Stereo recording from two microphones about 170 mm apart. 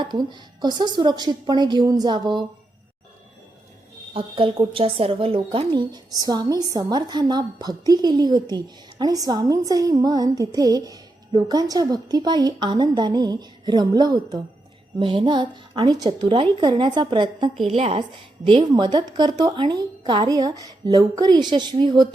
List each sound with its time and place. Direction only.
0.0 s a woman's voice: 25° right (ahead or behind)
4.1 s a woman's voice: 30° right (ahead or behind)